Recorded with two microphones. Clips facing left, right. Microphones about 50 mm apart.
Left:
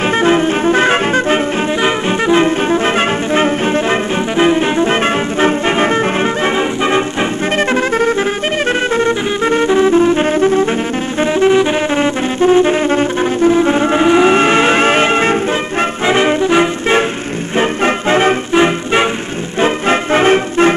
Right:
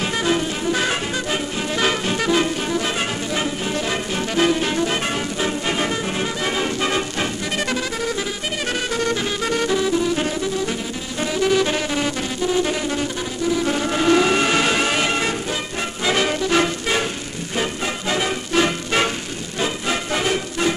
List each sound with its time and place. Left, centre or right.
0.2 s music: left
1.8 s music: left
11.3 s music: left
18.5 s music: left
19.6 s music: left